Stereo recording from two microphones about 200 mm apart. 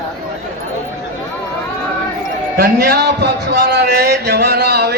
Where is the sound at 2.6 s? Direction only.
50° right (ahead or behind).